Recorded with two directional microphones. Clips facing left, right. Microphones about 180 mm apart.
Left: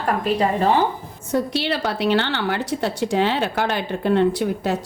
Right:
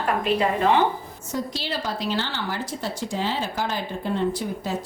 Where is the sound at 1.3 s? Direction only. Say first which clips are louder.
Left 7 dB; 65° left (ahead or behind).